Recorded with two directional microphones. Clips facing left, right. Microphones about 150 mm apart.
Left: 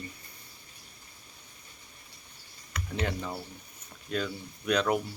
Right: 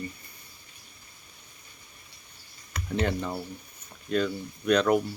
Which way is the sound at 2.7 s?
30° right (ahead or behind).